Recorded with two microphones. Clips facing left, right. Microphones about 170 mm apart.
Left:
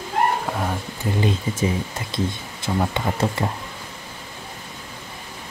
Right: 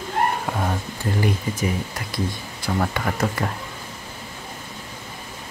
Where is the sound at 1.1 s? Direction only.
25° left (ahead or behind).